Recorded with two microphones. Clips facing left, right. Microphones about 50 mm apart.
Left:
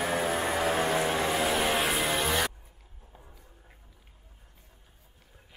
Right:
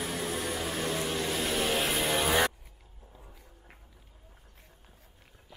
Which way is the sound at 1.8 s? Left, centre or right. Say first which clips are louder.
Left 1 dB; centre.